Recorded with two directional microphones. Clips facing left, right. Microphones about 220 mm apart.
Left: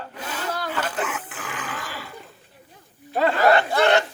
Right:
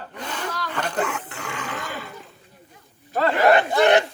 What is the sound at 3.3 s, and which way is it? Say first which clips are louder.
Speech: right 2 dB; 20° right (ahead or behind).